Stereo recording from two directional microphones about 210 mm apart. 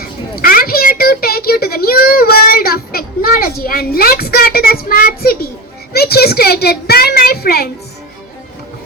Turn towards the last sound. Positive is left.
turn(degrees=45)  # may be behind; listen again after turning